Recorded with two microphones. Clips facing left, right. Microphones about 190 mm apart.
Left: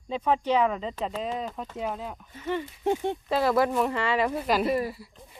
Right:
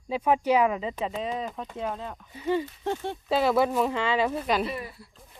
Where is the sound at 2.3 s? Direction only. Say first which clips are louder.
Right 4 dB; 15° right (ahead or behind).